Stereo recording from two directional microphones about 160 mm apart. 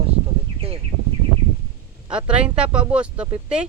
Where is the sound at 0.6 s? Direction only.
35° right (ahead or behind).